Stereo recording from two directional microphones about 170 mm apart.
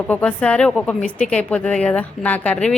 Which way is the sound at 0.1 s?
5° left (ahead or behind).